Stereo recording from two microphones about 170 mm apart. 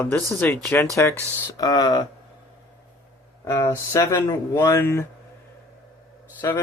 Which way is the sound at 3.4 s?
15° left (ahead or behind).